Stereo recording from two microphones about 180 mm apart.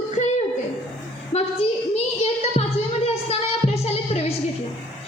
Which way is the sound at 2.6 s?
35° left (ahead or behind).